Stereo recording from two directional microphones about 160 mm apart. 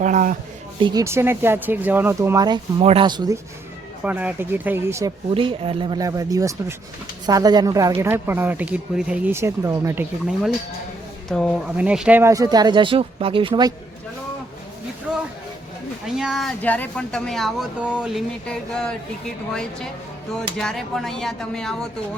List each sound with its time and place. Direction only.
0.0 s speech: 50° right (ahead or behind)
0.8 s speech: 30° right (ahead or behind)
1.0 s speech: 15° right (ahead or behind)
4.0 s speech: 10° right (ahead or behind)
5.3 s speech: 35° right (ahead or behind); by 10.3 s 15° right (ahead or behind)
11.3 s speech: 5° left (ahead or behind)
11.8 s speech: 5° right (ahead or behind); by 13.7 s 30° right (ahead or behind)
15.1 s a sound: 5° right (ahead or behind)
16.0 s speech: 5° right (ahead or behind)
16.6 s speech: 10° left (ahead or behind)
20.6 s speech: centre (ahead or behind)